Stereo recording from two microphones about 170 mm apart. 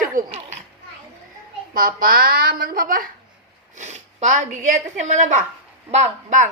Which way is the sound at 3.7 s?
45° right (ahead or behind).